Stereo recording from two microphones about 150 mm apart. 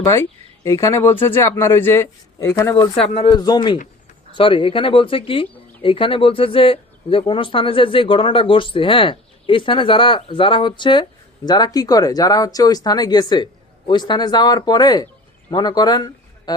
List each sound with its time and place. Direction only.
0.0 s speech: 20° left (ahead or behind)
3.2 s speech: 30° left (ahead or behind)